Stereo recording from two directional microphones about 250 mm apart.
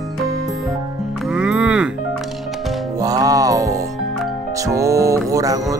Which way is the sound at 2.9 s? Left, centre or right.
Centre.